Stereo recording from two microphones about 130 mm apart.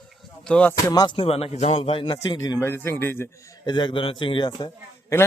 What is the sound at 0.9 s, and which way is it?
Speech, 30° left (ahead or behind).